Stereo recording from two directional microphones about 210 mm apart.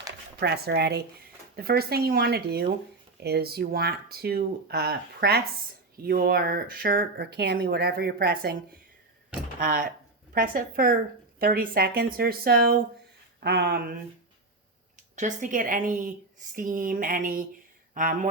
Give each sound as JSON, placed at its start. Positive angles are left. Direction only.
{"t": 0.3, "sound": "speech", "side_deg": -50}
{"t": 9.6, "sound": "speech", "side_deg": -40}
{"t": 14.9, "sound": "speech", "side_deg": -35}
{"t": 16.6, "sound": "a sound", "side_deg": -40}